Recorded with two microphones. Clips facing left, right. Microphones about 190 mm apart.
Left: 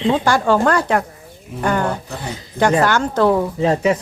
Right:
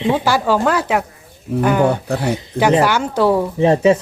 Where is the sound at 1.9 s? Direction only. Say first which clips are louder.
Right 7 dB; 70° right (ahead or behind).